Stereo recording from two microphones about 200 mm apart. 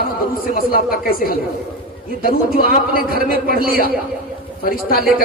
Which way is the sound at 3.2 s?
50° right (ahead or behind).